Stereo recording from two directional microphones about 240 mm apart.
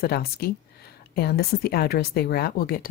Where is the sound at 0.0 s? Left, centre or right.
Left.